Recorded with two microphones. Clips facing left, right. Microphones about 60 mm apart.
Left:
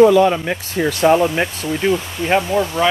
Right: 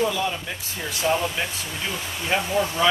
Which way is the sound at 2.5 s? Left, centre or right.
Centre.